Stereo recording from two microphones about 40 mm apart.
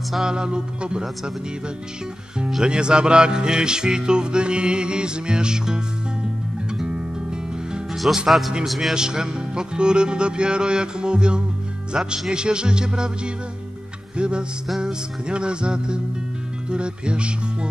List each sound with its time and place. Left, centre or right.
0.1 s speech: centre
2.6 s speech: right
6.9 s music: right
7.9 s music: centre
8.3 s a man's voice: centre
8.9 s speech: centre